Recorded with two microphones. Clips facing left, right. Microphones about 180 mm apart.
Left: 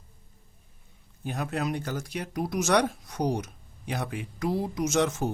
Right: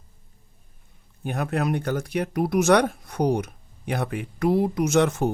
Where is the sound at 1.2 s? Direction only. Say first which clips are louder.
Right 5 dB; 60° right (ahead or behind).